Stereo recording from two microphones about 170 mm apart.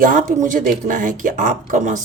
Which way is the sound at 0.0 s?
55° right (ahead or behind).